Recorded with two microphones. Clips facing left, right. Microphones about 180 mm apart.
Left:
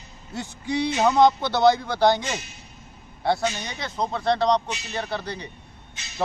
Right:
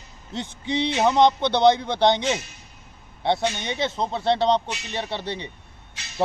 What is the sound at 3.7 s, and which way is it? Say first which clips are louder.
Speech: right 3 dB; 25° right (ahead or behind).